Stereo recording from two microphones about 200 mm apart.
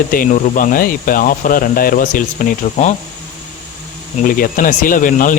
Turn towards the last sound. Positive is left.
turn(degrees=40)  # may be behind; listen again after turning